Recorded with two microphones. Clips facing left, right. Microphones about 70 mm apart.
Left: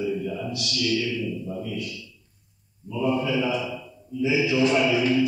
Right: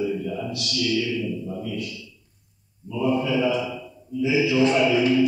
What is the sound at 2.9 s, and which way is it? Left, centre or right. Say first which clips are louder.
Music: right 1 dB; centre.